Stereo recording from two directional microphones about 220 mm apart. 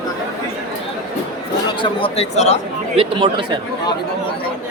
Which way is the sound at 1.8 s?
25° left (ahead or behind).